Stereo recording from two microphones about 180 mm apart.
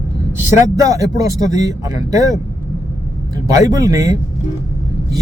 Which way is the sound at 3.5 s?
20° right (ahead or behind).